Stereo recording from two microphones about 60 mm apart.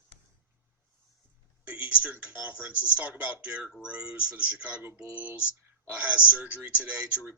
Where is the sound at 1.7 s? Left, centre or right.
Right.